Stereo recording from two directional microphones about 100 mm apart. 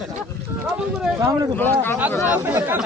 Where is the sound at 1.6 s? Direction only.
20° left (ahead or behind).